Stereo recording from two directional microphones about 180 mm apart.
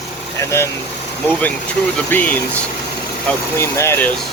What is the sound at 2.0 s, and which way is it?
Speech, 10° left (ahead or behind).